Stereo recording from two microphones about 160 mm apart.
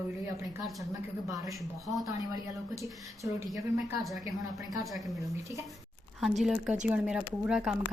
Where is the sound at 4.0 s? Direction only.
Centre (ahead or behind).